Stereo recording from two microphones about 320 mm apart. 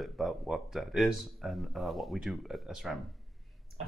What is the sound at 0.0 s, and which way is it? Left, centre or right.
Speech, centre.